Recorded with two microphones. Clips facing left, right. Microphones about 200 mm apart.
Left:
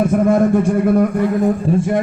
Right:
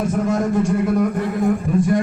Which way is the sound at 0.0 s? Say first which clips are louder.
Left 6 dB; 55° left (ahead or behind).